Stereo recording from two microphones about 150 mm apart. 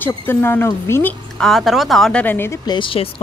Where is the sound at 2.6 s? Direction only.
35° left (ahead or behind).